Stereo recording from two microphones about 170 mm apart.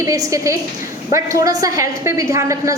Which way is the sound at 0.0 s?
20° right (ahead or behind).